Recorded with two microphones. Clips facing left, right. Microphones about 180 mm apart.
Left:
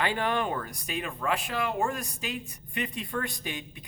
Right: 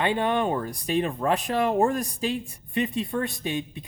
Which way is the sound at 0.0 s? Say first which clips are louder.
Right 4 dB; 25° right (ahead or behind).